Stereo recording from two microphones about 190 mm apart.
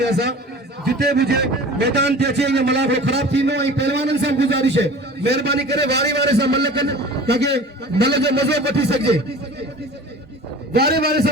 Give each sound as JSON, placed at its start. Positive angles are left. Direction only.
{"t": 0.0, "sound": "a man's voice", "side_deg": -60}
{"t": 10.7, "sound": "a man's voice", "side_deg": -55}